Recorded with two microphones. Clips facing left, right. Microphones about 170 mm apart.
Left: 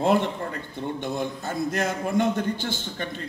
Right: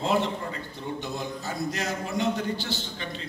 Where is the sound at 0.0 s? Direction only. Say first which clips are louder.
Left 4 dB; 55° left (ahead or behind).